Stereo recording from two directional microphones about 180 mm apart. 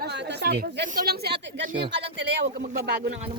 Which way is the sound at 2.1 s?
75° right (ahead or behind).